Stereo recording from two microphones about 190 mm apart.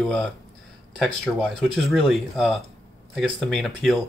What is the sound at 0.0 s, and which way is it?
Speech, centre (ahead or behind).